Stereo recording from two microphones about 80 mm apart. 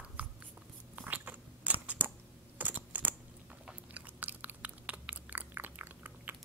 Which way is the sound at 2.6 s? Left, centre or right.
Right.